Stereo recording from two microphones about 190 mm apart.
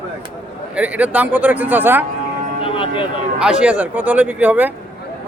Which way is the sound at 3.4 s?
5° right (ahead or behind).